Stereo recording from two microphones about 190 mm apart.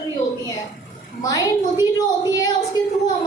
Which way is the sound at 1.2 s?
20° left (ahead or behind).